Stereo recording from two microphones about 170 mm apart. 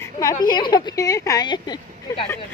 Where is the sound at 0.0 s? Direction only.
20° left (ahead or behind).